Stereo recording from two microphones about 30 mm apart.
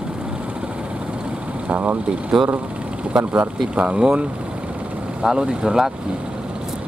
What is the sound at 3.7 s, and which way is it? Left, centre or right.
Speech, right.